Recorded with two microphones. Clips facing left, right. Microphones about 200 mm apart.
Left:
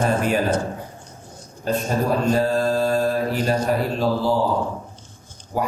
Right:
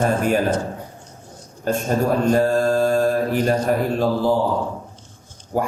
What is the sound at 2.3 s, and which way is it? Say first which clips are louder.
Mantra: right 3 dB; 50° right (ahead or behind).